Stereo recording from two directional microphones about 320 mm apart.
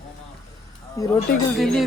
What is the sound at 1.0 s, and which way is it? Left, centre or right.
Speech, centre.